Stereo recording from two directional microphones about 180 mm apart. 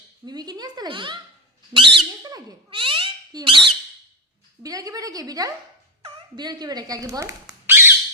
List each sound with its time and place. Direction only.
0.3 s speech: 25° right (ahead or behind)
7.4 s squawk: 10° right (ahead or behind)